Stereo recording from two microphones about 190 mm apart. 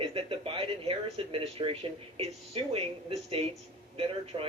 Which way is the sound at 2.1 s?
30° right (ahead or behind).